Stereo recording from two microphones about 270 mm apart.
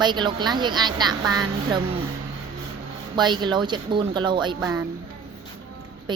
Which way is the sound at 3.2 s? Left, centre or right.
Centre.